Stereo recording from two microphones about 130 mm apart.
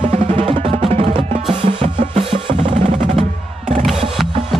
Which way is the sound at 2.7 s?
50° right (ahead or behind).